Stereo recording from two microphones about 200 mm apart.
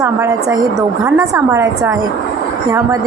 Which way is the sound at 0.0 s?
15° right (ahead or behind).